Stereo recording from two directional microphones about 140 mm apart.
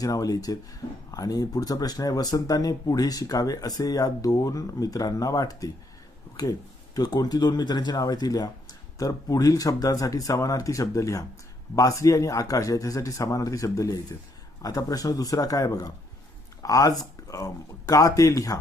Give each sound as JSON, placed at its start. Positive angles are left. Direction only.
{"t": 0.0, "sound": "speech", "side_deg": 25}